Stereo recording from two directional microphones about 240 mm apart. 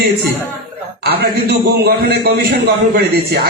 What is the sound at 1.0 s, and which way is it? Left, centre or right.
A man's voice, right.